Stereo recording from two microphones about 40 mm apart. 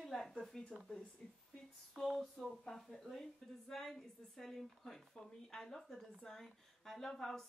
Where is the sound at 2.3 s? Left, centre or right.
Centre.